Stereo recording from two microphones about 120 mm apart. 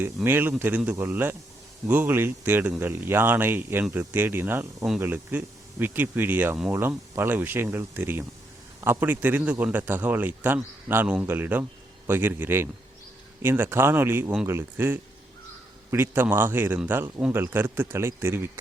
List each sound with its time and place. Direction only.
0.3 s a man's voice: 20° right (ahead or behind)